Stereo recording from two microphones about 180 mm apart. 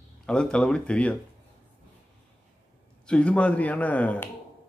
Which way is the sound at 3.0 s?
5° left (ahead or behind).